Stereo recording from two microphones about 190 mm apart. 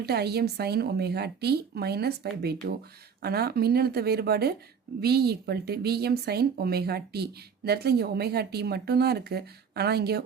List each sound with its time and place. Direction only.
0.0 s speech: 60° right (ahead or behind)